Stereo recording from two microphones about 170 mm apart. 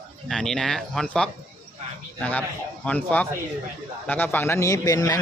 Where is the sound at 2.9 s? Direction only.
10° left (ahead or behind).